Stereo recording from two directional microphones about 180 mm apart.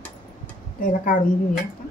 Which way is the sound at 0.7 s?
50° left (ahead or behind).